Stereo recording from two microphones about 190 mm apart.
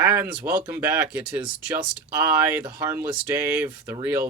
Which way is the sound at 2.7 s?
20° right (ahead or behind).